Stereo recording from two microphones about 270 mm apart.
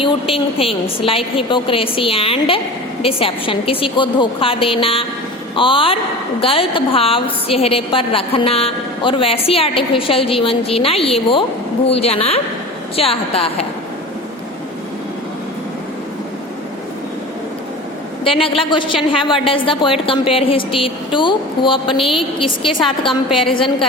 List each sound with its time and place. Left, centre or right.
0.0 s a woman's voice: centre
18.3 s a woman's voice: centre